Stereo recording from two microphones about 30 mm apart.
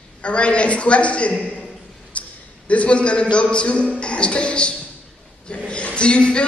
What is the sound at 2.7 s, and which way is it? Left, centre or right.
Speech, left.